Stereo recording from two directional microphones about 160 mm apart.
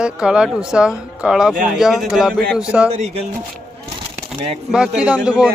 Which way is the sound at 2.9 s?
45° right (ahead or behind).